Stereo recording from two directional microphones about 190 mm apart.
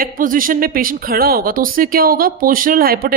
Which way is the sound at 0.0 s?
45° right (ahead or behind).